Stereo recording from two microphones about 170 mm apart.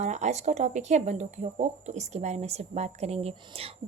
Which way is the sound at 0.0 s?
40° right (ahead or behind).